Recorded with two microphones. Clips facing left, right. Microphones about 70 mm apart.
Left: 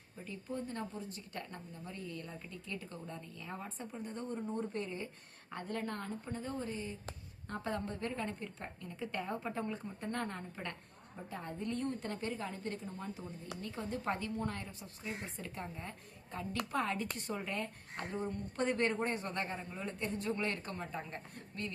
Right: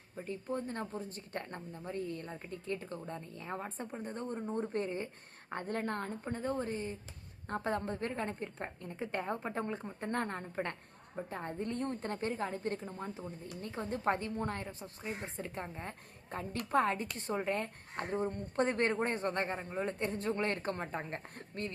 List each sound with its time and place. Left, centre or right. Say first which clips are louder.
0.3 s a woman's voice: right 4 dB; right